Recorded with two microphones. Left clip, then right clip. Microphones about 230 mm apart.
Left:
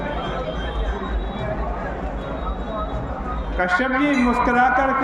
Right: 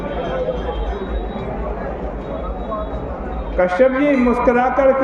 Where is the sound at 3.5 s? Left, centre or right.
Centre.